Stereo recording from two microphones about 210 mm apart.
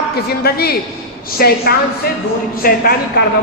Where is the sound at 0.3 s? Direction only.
50° left (ahead or behind).